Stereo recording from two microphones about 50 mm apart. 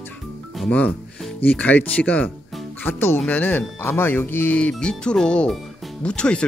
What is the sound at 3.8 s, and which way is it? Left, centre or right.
Speech, left.